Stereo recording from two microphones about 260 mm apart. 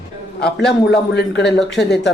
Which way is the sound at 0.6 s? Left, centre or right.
Left.